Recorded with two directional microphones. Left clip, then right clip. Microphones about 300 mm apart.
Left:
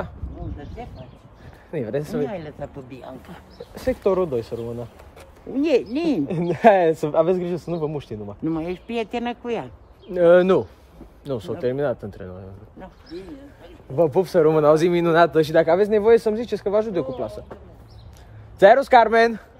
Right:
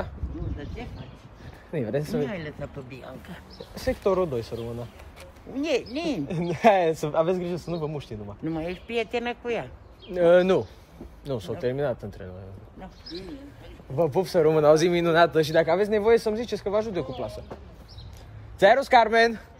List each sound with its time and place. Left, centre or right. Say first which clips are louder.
1.7 s speech: left 2 dB; centre
2.2 s speech: left 3 dB; left
4.0 s speech: left 3 dB; centre
5.5 s a man's voice: left 7 dB; left
6.5 s speech: left 5 dB; centre
8.5 s a man's voice: left 4 dB; left
10.1 s speech: left 4 dB; centre
13.9 s speech: left 5 dB; centre
18.6 s speech: left 5 dB; centre